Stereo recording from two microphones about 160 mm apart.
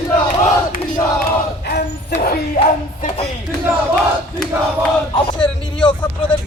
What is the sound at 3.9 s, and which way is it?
Battle cry, 5° left (ahead or behind).